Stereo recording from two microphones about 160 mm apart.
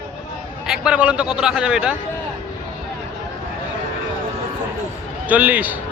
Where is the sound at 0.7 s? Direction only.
5° right (ahead or behind).